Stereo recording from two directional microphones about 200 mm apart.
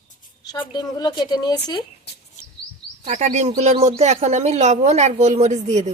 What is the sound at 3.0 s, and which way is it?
Speech, 35° right (ahead or behind).